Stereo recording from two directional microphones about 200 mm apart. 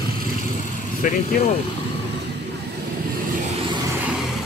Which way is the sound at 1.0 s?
40° left (ahead or behind).